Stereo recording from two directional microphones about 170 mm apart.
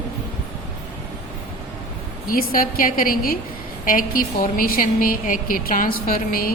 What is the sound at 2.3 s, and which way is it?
A woman's voice, 55° left (ahead or behind).